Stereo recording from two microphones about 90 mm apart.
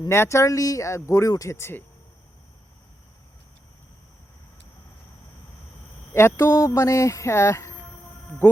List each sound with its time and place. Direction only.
0.1 s speech: 30° left (ahead or behind)
6.1 s speech: 30° left (ahead or behind)